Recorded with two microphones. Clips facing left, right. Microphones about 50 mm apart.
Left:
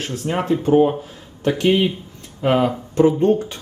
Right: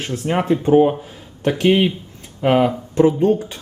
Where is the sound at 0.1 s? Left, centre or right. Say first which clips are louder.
Right 3 dB; right.